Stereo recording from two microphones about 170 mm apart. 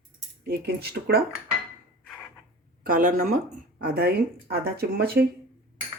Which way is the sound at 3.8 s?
65° right (ahead or behind).